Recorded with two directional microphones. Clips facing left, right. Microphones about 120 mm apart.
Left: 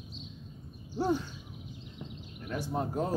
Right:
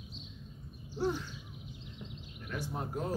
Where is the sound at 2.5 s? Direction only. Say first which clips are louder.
Left 5 dB; 30° left (ahead or behind).